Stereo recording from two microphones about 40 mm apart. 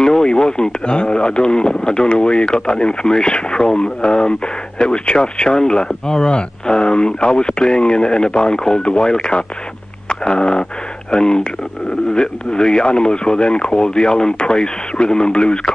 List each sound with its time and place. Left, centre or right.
0.0 s speech: centre
10.0 s a sound: left
11.1 s speech: centre